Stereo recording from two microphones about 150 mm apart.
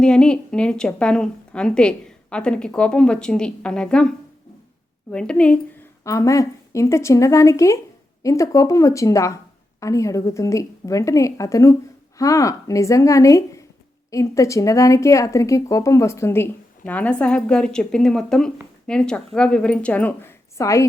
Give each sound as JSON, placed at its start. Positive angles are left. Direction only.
{"t": 0.0, "sound": "a woman's voice", "side_deg": 5}
{"t": 5.1, "sound": "speech", "side_deg": 5}
{"t": 6.0, "sound": "a woman's voice", "side_deg": 20}